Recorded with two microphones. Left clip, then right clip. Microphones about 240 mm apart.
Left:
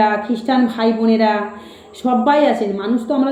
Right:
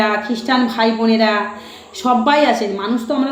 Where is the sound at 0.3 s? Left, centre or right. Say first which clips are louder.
Even; centre.